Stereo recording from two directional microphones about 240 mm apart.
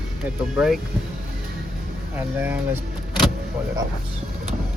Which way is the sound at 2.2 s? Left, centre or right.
Centre.